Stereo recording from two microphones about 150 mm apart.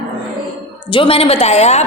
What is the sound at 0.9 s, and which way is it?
Speech, 40° left (ahead or behind).